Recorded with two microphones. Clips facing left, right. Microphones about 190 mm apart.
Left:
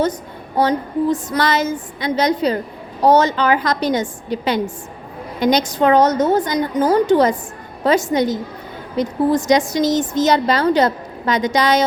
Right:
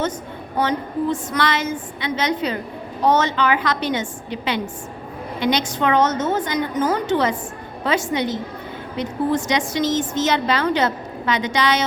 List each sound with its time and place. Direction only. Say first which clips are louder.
0.5 s a woman's voice: left 4 dB; 35° left (ahead or behind)